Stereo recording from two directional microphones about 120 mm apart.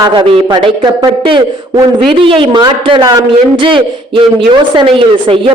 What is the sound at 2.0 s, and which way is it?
A man's voice, 45° right (ahead or behind).